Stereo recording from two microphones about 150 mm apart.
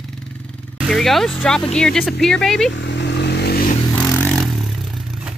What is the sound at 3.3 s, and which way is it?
Vehicle, 90° left.